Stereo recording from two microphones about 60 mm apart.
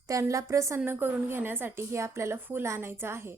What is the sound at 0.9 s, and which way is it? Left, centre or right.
A woman's voice, right.